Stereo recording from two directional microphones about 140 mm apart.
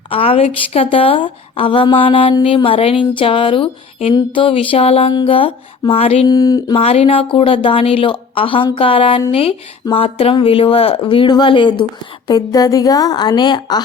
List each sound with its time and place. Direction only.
0.1 s speech: 45° left (ahead or behind)
6.2 s a woman's voice: 25° left (ahead or behind)
6.7 s a woman's voice: 45° left (ahead or behind)